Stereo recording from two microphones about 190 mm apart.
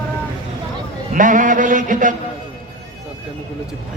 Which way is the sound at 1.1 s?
45° right (ahead or behind).